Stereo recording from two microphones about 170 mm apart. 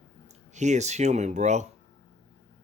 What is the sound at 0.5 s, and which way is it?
Speech, 45° right (ahead or behind).